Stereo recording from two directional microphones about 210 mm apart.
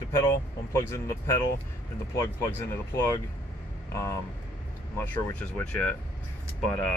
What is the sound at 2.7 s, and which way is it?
Speech, 10° left (ahead or behind).